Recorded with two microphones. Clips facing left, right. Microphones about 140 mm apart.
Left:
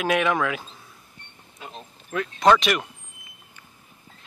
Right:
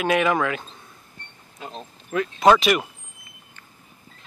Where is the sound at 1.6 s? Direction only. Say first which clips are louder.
Right 4 dB; 25° right (ahead or behind).